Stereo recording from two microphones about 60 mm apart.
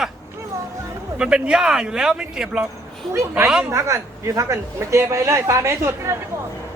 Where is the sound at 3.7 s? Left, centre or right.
Right.